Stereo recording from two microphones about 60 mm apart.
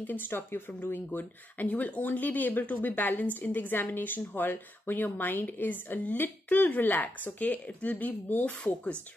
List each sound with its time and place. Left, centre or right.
0.0 s a woman's voice: left